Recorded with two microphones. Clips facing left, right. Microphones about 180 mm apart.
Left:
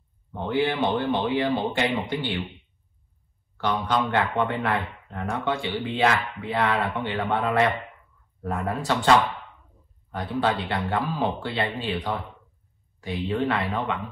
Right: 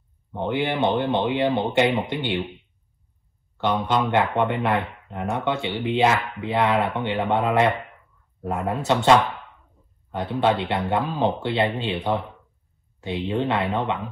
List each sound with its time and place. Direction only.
0.3 s speech: 20° right (ahead or behind)
3.5 s speech: 20° right (ahead or behind)
10.1 s speech: 20° right (ahead or behind)